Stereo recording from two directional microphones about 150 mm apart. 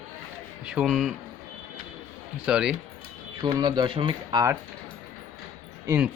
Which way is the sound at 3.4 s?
30° right (ahead or behind).